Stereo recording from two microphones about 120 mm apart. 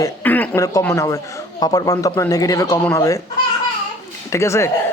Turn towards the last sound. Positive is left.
turn(degrees=25)  # may be behind; listen again after turning